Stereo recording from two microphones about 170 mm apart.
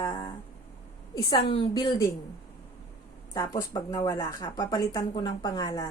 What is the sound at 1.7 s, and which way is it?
Speech, 25° left (ahead or behind).